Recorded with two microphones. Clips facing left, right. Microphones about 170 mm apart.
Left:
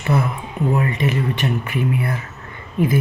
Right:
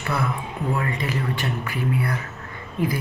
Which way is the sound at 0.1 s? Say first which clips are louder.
Left 5 dB; 20° left (ahead or behind).